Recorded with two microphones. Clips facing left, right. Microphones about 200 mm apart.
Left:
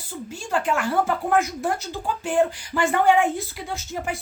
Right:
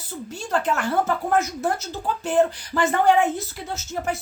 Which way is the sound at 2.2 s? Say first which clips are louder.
Right 1 dB; 10° left (ahead or behind).